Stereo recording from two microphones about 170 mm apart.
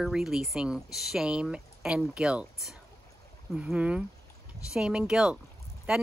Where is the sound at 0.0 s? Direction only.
Centre (ahead or behind).